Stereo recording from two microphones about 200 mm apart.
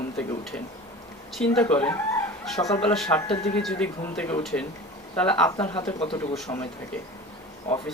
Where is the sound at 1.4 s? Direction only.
5° left (ahead or behind).